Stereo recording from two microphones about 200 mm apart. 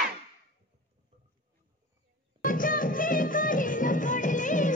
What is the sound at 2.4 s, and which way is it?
Music, 45° left (ahead or behind).